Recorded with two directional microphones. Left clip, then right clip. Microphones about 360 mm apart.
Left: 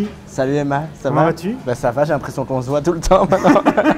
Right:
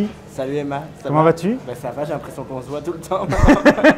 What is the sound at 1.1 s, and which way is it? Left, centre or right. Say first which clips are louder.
Speech: right 2 dB; right.